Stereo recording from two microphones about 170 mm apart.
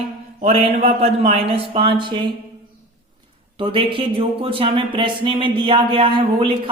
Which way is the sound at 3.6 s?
30° right (ahead or behind).